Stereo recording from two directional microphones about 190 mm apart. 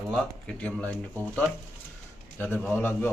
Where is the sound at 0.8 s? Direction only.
15° right (ahead or behind).